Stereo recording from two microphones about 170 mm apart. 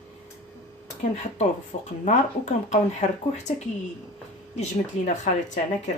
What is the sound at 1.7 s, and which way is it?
Speech, 45° left (ahead or behind).